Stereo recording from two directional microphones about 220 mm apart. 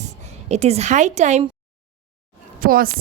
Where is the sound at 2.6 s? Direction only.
40° right (ahead or behind).